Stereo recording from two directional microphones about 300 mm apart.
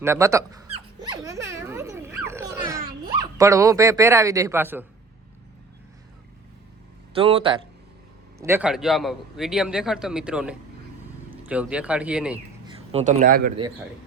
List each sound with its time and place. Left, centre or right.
0.0 s dog: centre
7.1 s speech: centre
8.4 s a man's voice: centre
12.6 s speech: centre